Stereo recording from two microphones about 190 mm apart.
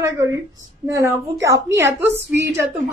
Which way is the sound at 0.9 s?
15° right (ahead or behind).